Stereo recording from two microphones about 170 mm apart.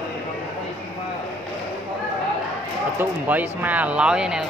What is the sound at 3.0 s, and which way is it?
Speech, 10° right (ahead or behind).